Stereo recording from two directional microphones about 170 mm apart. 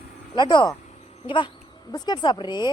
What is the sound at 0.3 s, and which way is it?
Speech, 25° left (ahead or behind).